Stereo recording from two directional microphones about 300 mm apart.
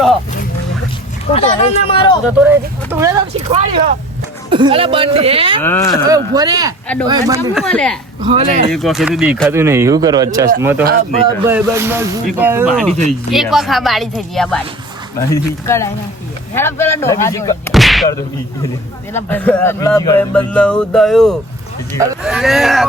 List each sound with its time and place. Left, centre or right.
1.3 s speech: left
2.2 s speech: centre
5.6 s speech: centre
6.1 s speech: centre
7.5 s speech: centre
8.2 s speech: centre
8.7 s speech: centre
17.7 s a sound: centre
19.1 s speech: centre